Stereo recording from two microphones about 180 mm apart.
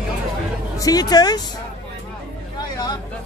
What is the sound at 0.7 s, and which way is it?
Speech, 20° left (ahead or behind).